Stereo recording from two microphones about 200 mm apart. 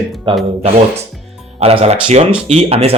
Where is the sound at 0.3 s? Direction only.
25° right (ahead or behind).